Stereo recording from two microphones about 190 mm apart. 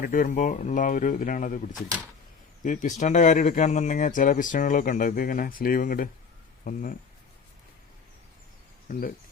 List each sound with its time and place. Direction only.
0.0 s speech: 45° left (ahead or behind)
1.7 s speech: 5° left (ahead or behind)
2.6 s speech: 40° left (ahead or behind)
8.9 s speech: 50° left (ahead or behind)